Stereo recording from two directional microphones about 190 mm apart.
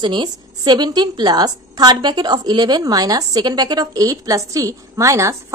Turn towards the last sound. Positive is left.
turn(degrees=-15)  # may be behind; listen again after turning